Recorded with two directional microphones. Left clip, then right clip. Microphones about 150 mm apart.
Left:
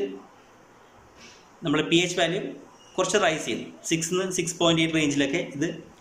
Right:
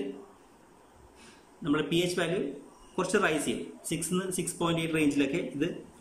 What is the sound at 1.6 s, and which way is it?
Speech, 10° right (ahead or behind).